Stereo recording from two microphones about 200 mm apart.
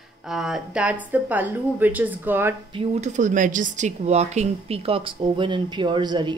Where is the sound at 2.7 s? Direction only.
35° right (ahead or behind).